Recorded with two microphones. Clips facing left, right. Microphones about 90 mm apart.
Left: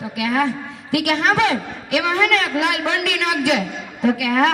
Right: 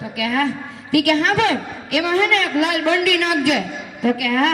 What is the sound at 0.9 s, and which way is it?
Speech, 30° left (ahead or behind).